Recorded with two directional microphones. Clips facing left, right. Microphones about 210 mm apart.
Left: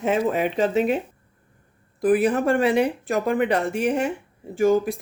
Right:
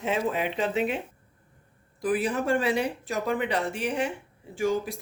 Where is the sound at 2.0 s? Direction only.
55° left (ahead or behind).